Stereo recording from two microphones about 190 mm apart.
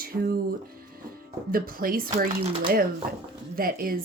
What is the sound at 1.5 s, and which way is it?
Speech, 50° right (ahead or behind).